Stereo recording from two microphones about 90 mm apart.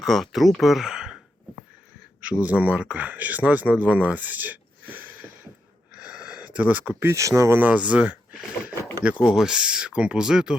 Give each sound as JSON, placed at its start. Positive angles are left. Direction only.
{"t": 0.1, "sound": "speech", "side_deg": 0}
{"t": 2.3, "sound": "speech", "side_deg": -15}
{"t": 5.9, "sound": "a sound", "side_deg": -15}
{"t": 7.1, "sound": "speech", "side_deg": -35}
{"t": 7.6, "sound": "speech", "side_deg": -15}
{"t": 8.3, "sound": "a sound", "side_deg": -10}
{"t": 9.2, "sound": "speech", "side_deg": -5}